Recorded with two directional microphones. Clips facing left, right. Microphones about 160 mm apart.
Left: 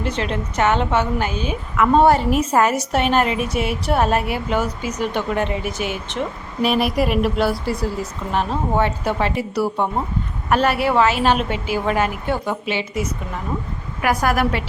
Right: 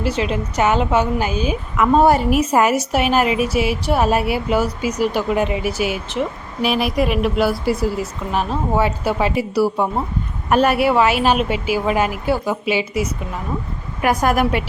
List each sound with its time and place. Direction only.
0.0 s a woman's voice: 5° right (ahead or behind)
14.0 s a woman's voice: 20° right (ahead or behind)